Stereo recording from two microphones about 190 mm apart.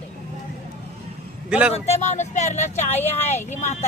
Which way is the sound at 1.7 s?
35° left (ahead or behind).